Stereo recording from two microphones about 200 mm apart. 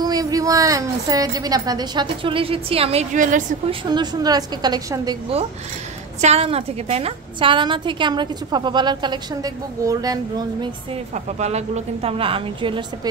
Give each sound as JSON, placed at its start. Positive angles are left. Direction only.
{"t": 0.0, "sound": "a woman's voice", "side_deg": -20}
{"t": 3.9, "sound": "a woman's voice", "side_deg": -20}
{"t": 6.2, "sound": "a woman's voice", "side_deg": -30}
{"t": 11.3, "sound": "a woman's voice", "side_deg": -35}